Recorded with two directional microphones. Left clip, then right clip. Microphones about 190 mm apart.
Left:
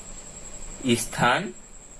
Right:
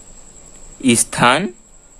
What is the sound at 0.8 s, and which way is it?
Speech, 60° right (ahead or behind).